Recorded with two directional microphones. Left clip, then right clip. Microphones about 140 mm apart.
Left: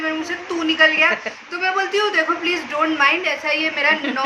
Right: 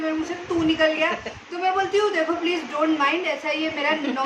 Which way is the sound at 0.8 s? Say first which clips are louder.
Left 6 dB; 30° right (ahead or behind).